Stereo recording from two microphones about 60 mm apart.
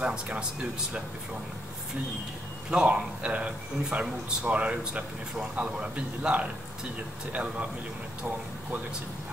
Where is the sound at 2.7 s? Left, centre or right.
Centre.